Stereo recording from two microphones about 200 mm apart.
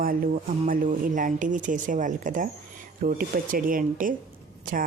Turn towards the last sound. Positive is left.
turn(degrees=-45)  # may be behind; listen again after turning